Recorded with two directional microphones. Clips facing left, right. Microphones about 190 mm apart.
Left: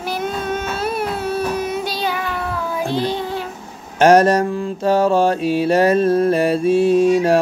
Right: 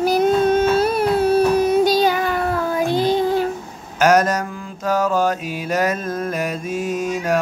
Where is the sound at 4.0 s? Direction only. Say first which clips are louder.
Left 4 dB; 30° left (ahead or behind).